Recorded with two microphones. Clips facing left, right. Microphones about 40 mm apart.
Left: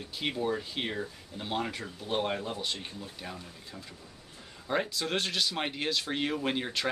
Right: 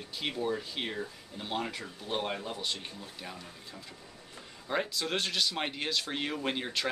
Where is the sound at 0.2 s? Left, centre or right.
Centre.